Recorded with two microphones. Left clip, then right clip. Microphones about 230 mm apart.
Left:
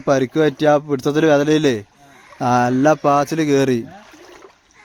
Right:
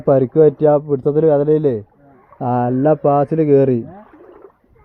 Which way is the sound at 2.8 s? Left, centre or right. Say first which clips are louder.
Right 4 dB; left.